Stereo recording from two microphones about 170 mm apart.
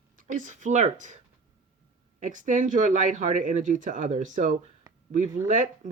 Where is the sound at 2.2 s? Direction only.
50° right (ahead or behind).